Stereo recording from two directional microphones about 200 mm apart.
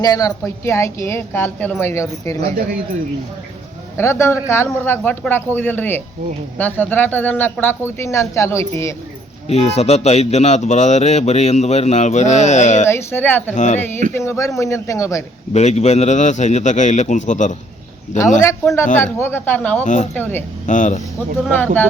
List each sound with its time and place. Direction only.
0.0 s speech: 15° left (ahead or behind)
3.9 s speech: 15° left (ahead or behind)
9.5 s speech: 30° left (ahead or behind)
12.9 s speech: 10° left (ahead or behind)
13.5 s speech: 35° left (ahead or behind)
13.7 s speech: 10° left (ahead or behind)
15.5 s speech: 35° left (ahead or behind)
18.3 s speech: 15° left (ahead or behind)
19.8 s speech: 35° left (ahead or behind)
20.1 s speech: 10° left (ahead or behind)
20.7 s speech: 40° left (ahead or behind)